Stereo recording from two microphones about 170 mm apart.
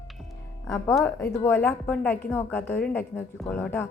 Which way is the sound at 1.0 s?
15° left (ahead or behind).